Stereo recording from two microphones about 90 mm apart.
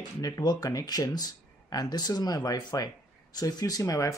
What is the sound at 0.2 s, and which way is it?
Speech, 45° left (ahead or behind).